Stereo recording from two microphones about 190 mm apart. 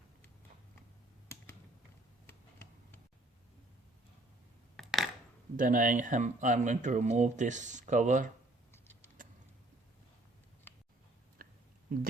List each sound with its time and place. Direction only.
2.2 s tick: 10° left (ahead or behind)
4.8 s coin: centre (ahead or behind)
5.5 s speech: 45° right (ahead or behind)
9.2 s a sound: 45° right (ahead or behind)
11.4 s chewing: 50° right (ahead or behind)
11.9 s a sound: 50° right (ahead or behind)